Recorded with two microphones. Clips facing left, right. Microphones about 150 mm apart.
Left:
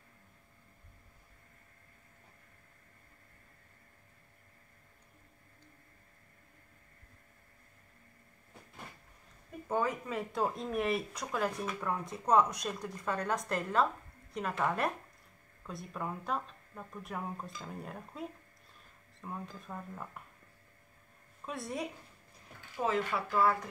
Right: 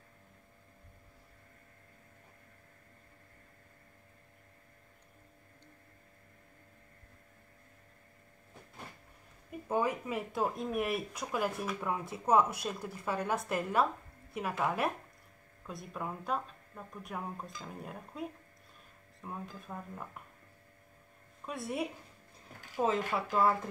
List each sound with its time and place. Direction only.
9.7 s speech: 10° right (ahead or behind)
21.5 s speech: 5° right (ahead or behind)
22.8 s speech: 20° right (ahead or behind)